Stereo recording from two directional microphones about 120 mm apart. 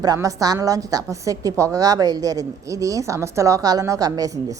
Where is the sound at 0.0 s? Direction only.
30° right (ahead or behind).